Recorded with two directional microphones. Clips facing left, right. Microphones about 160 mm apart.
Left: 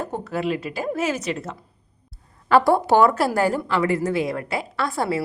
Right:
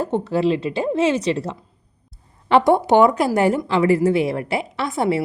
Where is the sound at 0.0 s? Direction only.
30° right (ahead or behind).